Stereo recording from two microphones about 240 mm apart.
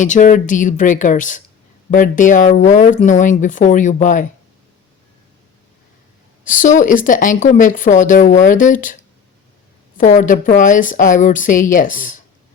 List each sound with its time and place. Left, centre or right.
0.0 s speech: left
6.4 s speech: left
10.0 s speech: left